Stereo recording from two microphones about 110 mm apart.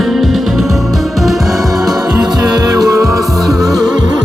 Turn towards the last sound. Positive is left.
turn(degrees=-35)  # may be behind; listen again after turning